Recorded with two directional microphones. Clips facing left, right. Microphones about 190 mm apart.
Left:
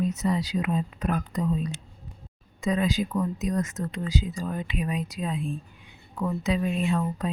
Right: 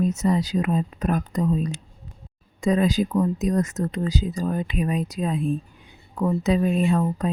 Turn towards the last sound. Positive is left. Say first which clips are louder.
# right 5 dB
turn(degrees=-45)  # may be behind; listen again after turning